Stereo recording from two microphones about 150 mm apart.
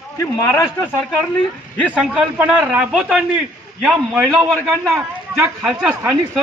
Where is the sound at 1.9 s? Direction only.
Centre (ahead or behind).